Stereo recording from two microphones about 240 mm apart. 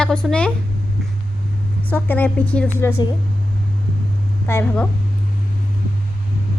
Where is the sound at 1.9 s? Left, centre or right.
Centre.